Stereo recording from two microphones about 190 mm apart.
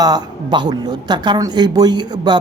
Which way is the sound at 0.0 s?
20° right (ahead or behind).